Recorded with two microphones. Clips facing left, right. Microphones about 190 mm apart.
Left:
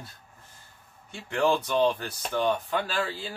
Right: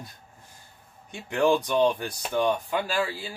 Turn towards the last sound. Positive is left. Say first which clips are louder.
# right 2 dB
turn(degrees=-10)  # may be behind; listen again after turning